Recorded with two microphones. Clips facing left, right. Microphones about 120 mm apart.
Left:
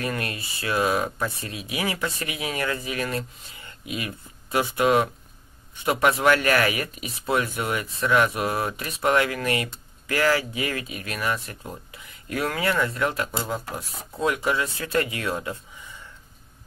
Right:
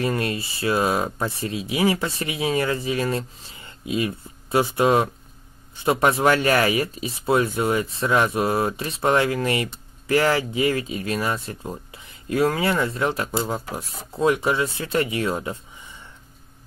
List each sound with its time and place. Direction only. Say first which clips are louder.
0.0 s speech: right 5 dB; 25° right (ahead or behind)